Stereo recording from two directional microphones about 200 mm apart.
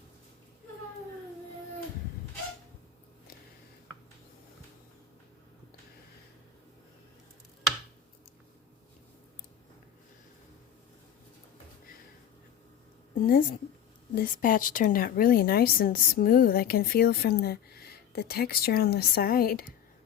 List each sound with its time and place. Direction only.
13.1 s a woman's voice: 45° left (ahead or behind)